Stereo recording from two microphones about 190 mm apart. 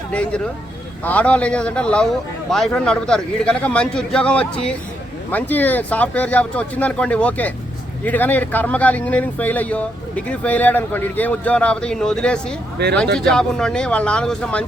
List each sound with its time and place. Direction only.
0.1 s a man's voice: 5° left (ahead or behind)
12.8 s speech: 60° right (ahead or behind)
13.3 s a man's voice: 5° left (ahead or behind)